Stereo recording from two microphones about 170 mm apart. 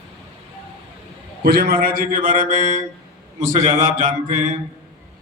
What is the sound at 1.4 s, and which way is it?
Speech, 70° right (ahead or behind).